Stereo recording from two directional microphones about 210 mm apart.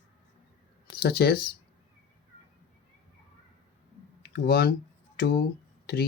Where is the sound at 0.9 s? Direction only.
50° left (ahead or behind).